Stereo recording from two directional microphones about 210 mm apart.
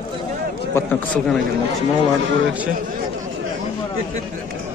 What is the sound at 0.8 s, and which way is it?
Speech, 10° left (ahead or behind).